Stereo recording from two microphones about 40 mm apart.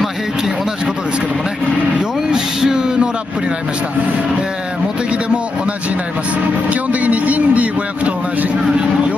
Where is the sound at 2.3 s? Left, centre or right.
Centre.